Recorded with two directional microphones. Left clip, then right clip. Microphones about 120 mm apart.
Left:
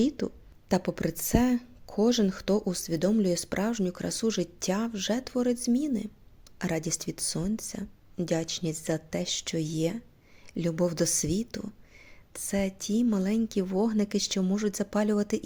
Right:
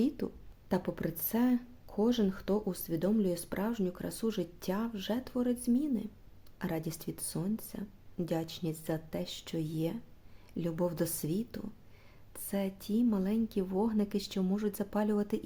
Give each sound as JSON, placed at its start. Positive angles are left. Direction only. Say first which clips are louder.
{"t": 0.0, "sound": "a woman's voice", "louder": "left 5 dB", "side_deg": 25}